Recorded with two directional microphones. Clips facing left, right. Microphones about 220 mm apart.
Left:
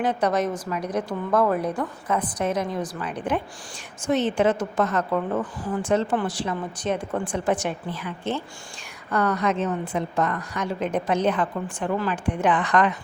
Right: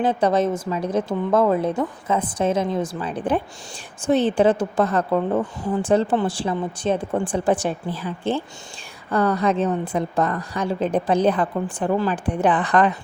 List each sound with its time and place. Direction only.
0.0 s a woman's voice: 30° right (ahead or behind)